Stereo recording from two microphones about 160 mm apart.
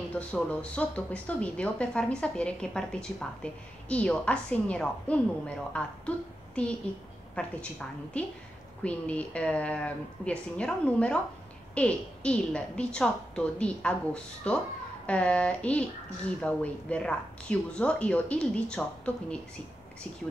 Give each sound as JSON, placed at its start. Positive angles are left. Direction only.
{"t": 0.1, "sound": "a woman's voice", "side_deg": 10}